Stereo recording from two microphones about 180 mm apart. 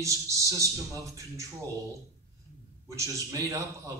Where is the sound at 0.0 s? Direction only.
15° right (ahead or behind).